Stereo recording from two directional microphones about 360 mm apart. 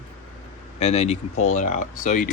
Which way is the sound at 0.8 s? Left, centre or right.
Centre.